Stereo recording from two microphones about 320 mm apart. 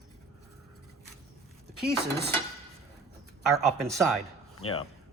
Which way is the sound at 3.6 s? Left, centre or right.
Centre.